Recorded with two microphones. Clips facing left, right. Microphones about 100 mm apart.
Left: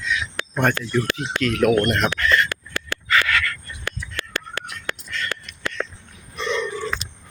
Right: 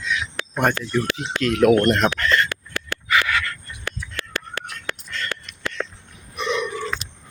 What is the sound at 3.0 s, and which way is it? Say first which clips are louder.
Frog: even; 15° right (ahead or behind).